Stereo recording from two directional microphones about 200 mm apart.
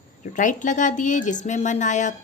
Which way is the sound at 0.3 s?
40° left (ahead or behind).